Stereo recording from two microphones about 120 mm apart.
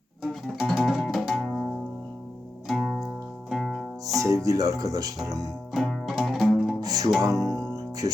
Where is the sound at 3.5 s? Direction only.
Centre (ahead or behind).